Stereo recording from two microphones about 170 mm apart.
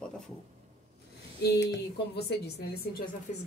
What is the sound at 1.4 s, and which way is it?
A woman's voice, 75° left (ahead or behind).